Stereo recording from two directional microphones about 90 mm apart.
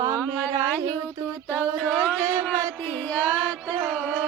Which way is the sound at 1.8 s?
5° left (ahead or behind).